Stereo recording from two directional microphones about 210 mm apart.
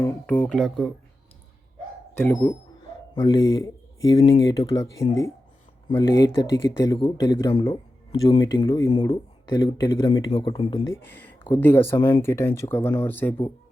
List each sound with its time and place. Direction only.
0.0 s speech: 10° left (ahead or behind)
2.1 s speech: 10° left (ahead or behind)
11.0 s speech: 5° left (ahead or behind)
11.9 s speech: 25° left (ahead or behind)
12.2 s speech: 10° left (ahead or behind)